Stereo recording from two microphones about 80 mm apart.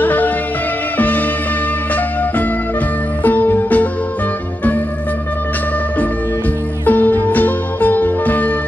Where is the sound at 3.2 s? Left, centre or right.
Left.